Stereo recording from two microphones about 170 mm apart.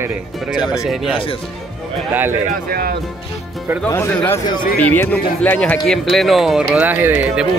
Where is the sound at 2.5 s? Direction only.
60° right (ahead or behind).